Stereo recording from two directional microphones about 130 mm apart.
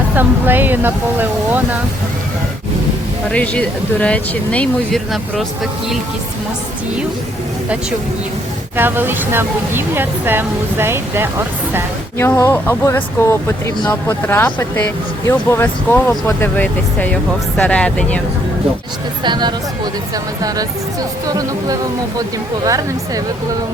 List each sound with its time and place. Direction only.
0.2 s speech: 15° right (ahead or behind)
3.3 s speech: 10° left (ahead or behind)
8.7 s speech: 15° right (ahead or behind)
12.2 s speech: 20° left (ahead or behind)
19.2 s speech: 35° right (ahead or behind)
21.2 s speech: 30° right (ahead or behind)